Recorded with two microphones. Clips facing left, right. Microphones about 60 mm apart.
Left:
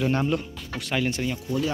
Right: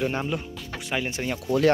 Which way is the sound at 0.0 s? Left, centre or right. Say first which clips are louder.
Left 3 dB; centre.